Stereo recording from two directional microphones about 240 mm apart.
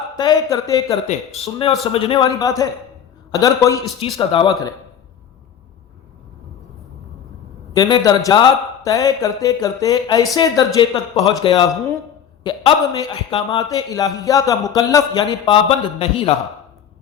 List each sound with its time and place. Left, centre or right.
0.2 s a man's voice: centre
7.7 s a man's voice: centre